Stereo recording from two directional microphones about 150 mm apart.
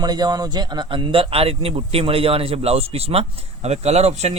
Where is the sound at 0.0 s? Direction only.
25° right (ahead or behind).